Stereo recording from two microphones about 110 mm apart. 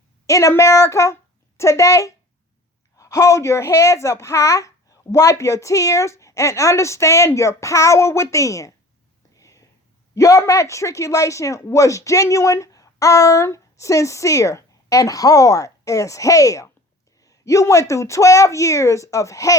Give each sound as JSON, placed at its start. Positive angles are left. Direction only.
{"t": 0.3, "sound": "speech", "side_deg": 30}
{"t": 9.3, "sound": "whispering", "side_deg": 30}
{"t": 10.2, "sound": "speech", "side_deg": 30}